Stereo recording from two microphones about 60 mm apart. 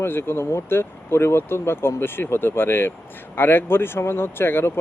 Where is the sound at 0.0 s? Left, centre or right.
Left.